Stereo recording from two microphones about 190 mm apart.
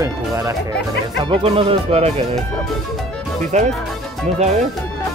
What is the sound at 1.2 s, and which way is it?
Speech, 30° right (ahead or behind).